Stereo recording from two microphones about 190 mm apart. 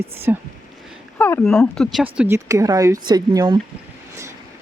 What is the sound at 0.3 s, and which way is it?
Speech, 10° right (ahead or behind).